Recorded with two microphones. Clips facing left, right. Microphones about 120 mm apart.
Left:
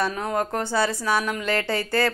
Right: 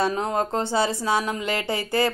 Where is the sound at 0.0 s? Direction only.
25° right (ahead or behind).